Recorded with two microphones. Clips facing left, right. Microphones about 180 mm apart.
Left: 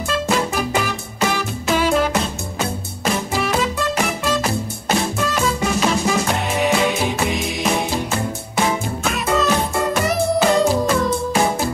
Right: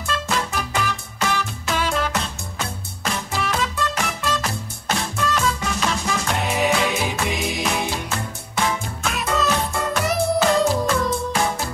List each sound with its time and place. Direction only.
0.1 s music: 5° left (ahead or behind)
7.6 s music: 15° left (ahead or behind)
9.0 s music: centre (ahead or behind)